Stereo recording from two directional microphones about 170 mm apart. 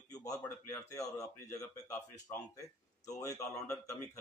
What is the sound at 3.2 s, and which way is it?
Speech, 20° left (ahead or behind).